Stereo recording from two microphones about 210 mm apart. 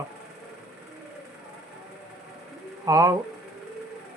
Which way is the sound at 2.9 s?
15° right (ahead or behind).